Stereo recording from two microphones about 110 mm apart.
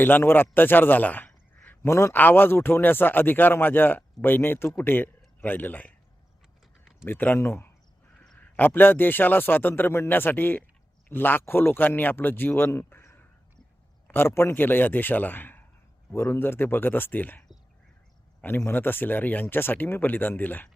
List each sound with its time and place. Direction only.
0.0 s a man's voice: 20° left (ahead or behind)
7.0 s a man's voice: 20° left (ahead or behind)
8.2 s a sound: 5° left (ahead or behind)
8.5 s a man's voice: 20° left (ahead or behind)
18.4 s speech: 20° left (ahead or behind)